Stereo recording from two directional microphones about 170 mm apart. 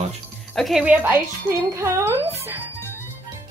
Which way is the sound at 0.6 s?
Centre (ahead or behind).